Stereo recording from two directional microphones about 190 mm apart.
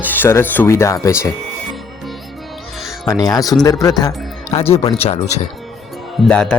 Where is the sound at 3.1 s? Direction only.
20° left (ahead or behind).